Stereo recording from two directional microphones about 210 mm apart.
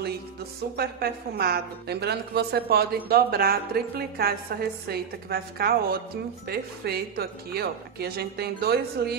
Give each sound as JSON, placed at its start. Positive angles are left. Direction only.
{"t": 0.7, "sound": "a woman's voice", "side_deg": -50}